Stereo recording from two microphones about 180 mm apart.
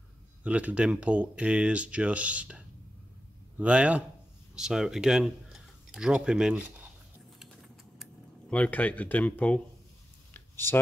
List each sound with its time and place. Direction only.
0.4 s speech: 10° right (ahead or behind)
7.3 s typing: centre (ahead or behind)
10.3 s a sound: 10° left (ahead or behind)